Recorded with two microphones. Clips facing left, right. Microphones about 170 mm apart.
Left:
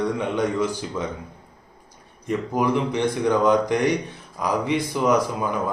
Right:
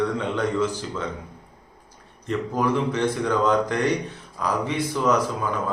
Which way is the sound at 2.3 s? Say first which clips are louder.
Left 1 dB; 15° left (ahead or behind).